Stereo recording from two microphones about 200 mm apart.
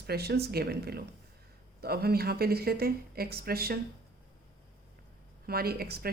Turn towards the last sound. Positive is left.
turn(degrees=-50)  # may be behind; listen again after turning